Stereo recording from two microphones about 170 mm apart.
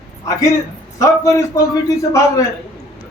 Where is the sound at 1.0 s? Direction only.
20° left (ahead or behind).